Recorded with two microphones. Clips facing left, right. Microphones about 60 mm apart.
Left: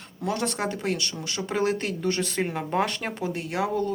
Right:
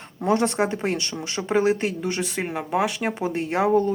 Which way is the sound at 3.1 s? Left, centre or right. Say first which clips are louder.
Right 5 dB; right.